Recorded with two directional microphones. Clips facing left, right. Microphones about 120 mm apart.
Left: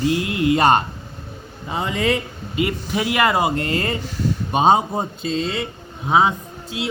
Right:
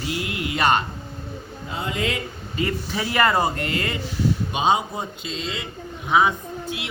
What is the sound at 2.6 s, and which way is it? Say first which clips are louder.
Speech: left 3 dB; 15° left (ahead or behind).